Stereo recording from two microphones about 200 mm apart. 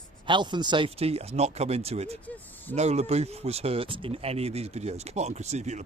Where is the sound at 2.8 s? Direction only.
30° right (ahead or behind).